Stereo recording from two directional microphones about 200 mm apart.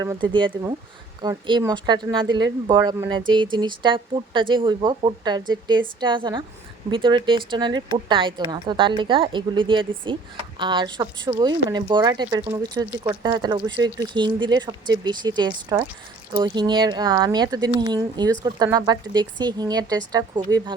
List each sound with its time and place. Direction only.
0.0 s speech: 20° right (ahead or behind)